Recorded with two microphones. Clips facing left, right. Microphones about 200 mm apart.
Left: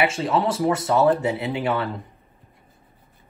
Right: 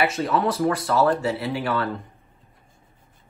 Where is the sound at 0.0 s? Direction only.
25° left (ahead or behind).